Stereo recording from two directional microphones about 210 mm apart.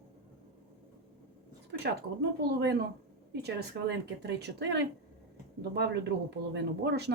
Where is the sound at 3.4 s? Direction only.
55° right (ahead or behind).